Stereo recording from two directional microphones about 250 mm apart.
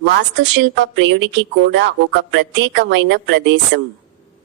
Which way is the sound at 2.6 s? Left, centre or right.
Right.